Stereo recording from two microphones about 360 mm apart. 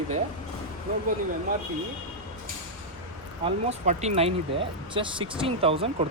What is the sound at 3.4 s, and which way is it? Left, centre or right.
Speech, centre.